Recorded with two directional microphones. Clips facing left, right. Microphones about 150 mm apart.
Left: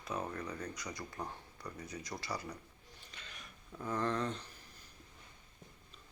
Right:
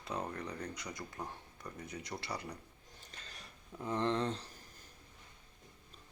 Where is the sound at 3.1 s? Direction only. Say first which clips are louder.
Even; 40° right (ahead or behind).